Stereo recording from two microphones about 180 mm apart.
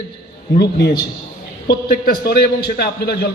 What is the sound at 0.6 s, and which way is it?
A man's voice, 60° left (ahead or behind).